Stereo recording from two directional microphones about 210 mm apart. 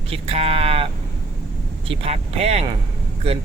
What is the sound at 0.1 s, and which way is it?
A man's voice, 30° right (ahead or behind).